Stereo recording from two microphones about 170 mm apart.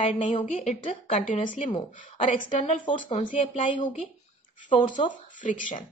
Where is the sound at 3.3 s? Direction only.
50° left (ahead or behind).